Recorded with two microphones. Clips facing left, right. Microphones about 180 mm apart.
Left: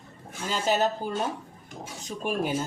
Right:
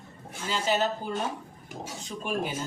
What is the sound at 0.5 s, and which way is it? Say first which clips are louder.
Speech: left 2 dB; 45° left (ahead or behind).